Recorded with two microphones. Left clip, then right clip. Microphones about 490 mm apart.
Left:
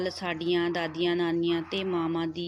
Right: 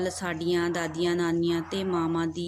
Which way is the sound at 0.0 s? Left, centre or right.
Right.